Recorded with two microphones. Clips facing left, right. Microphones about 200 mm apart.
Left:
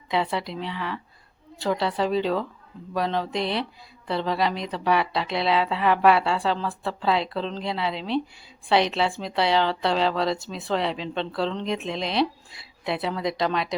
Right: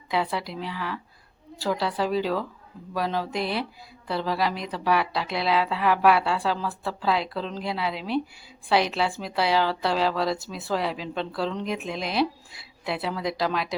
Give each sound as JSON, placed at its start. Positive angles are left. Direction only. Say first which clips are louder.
{"t": 0.1, "sound": "a woman's voice", "louder": "left 1 dB", "side_deg": 0}